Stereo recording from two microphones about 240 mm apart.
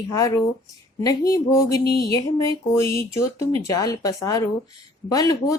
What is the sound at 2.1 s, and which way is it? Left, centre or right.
Speech, centre.